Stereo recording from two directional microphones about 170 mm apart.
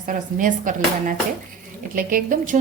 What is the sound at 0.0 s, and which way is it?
A woman's voice, 50° right (ahead or behind).